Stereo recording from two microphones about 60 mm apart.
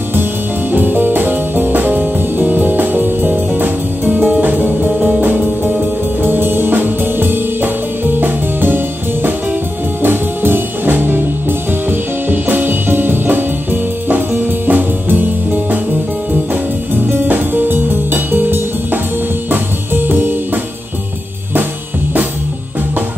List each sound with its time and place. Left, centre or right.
0.1 s music: right
4.8 s music: centre
6.2 s music: right
16.9 s music: right